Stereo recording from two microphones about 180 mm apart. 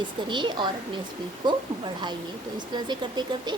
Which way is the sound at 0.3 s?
25° right (ahead or behind).